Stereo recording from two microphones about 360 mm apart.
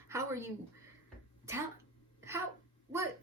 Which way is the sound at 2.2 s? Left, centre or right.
Centre.